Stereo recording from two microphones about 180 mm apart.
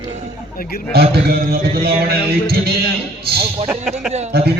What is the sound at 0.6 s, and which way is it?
Speech, 55° left (ahead or behind).